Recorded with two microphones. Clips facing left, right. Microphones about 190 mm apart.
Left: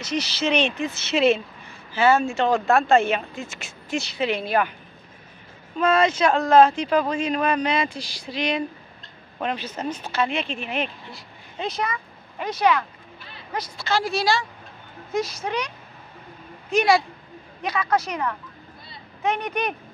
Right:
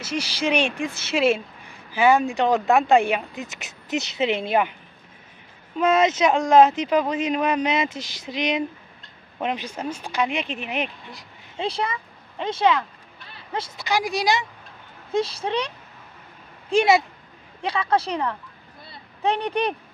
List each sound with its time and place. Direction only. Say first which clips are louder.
0.0 s speech: even; 10° right (ahead or behind)
5.8 s speech: right 1 dB; 20° right (ahead or behind)
11.6 s speech: right 1 dB; 30° right (ahead or behind)
15.0 s speech: right 2 dB; 30° right (ahead or behind)
16.7 s speech: right 1 dB; 20° right (ahead or behind)